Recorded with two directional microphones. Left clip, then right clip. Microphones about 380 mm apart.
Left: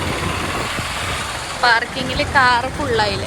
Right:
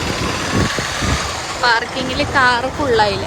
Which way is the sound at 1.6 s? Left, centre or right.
Centre.